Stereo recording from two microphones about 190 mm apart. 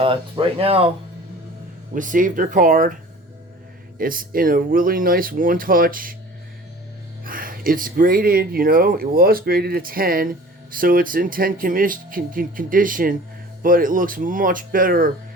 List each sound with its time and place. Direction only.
0.0 s speech: 30° right (ahead or behind)
1.9 s speech: 45° right (ahead or behind)
7.3 s speech: 50° right (ahead or behind)